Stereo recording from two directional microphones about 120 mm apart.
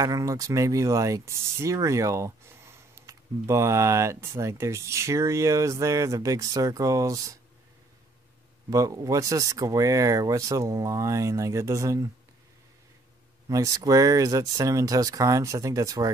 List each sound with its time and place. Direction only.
0.0 s speech: 25° right (ahead or behind)
8.6 s speech: 30° right (ahead or behind)
13.5 s speech: 30° right (ahead or behind)